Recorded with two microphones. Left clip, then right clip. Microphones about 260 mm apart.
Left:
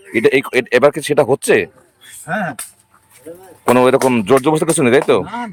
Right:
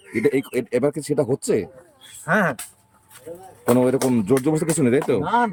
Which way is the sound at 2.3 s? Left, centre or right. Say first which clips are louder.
Right 1 dB; centre.